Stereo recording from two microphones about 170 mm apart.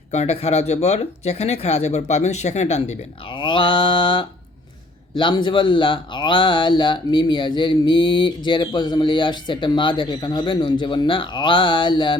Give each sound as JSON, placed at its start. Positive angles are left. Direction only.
{"t": 0.1, "sound": "speech", "side_deg": 40}